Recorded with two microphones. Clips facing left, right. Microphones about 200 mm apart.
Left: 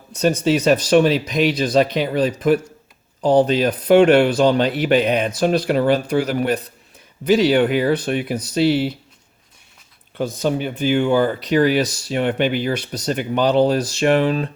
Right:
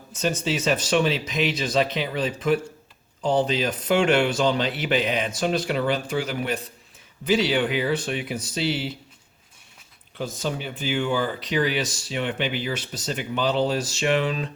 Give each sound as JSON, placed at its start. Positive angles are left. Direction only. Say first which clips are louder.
{"t": 0.1, "sound": "speech", "louder": "left 7 dB", "side_deg": 35}
{"t": 0.4, "sound": "speech", "louder": "left 8 dB", "side_deg": 55}
{"t": 6.2, "sound": "speech", "louder": "left 7 dB", "side_deg": 40}
{"t": 7.4, "sound": "speech", "louder": "left 7 dB", "side_deg": 55}
{"t": 10.2, "sound": "speech", "louder": "left 8 dB", "side_deg": 55}